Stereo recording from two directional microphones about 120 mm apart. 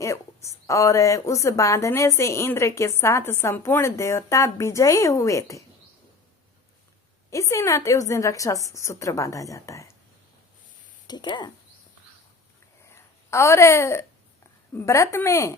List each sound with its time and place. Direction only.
0.7 s a woman's voice: 25° left (ahead or behind)
7.3 s a woman's voice: 25° left (ahead or behind)
11.0 s speech: 35° left (ahead or behind)
12.9 s a sound: 20° left (ahead or behind)
14.7 s a woman's voice: 20° left (ahead or behind)